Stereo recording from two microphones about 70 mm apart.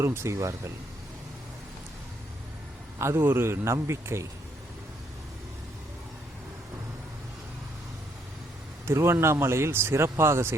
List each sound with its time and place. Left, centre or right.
0.0 s speech: right
3.0 s speech: right
8.9 s speech: right